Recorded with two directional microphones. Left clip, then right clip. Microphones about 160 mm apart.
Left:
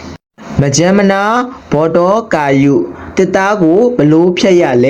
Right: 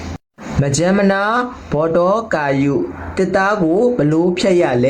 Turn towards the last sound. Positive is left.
turn(degrees=25)  # may be behind; listen again after turning